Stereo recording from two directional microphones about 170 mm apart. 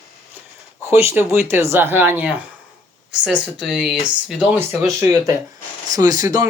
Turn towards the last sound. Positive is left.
turn(degrees=-20)  # may be behind; listen again after turning